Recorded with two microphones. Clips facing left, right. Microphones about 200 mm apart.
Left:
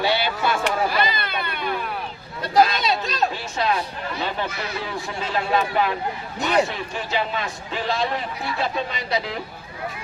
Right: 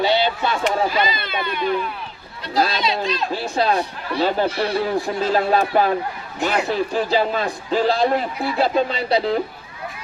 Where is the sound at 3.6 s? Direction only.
35° right (ahead or behind).